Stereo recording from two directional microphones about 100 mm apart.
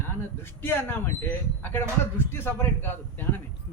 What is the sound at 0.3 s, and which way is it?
A man's voice, 25° left (ahead or behind).